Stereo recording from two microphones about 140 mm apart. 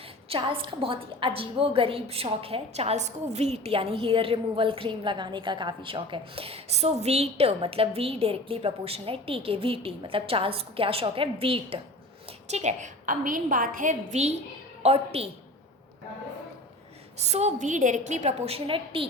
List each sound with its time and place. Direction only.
0.3 s a woman's voice: 40° right (ahead or behind)
12.5 s a woman's voice: 55° right (ahead or behind)
17.2 s a woman's voice: 50° right (ahead or behind)